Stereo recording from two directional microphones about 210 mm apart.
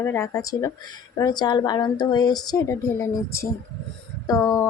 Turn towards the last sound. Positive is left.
turn(degrees=15)  # may be behind; listen again after turning